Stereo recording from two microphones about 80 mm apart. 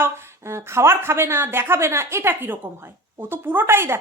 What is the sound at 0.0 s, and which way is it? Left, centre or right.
A woman's voice, right.